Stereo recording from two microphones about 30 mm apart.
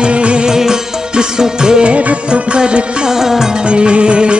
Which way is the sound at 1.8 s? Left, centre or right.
Right.